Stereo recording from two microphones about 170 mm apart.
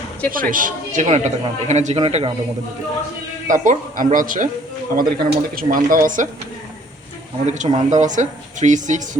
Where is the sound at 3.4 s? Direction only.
50° right (ahead or behind).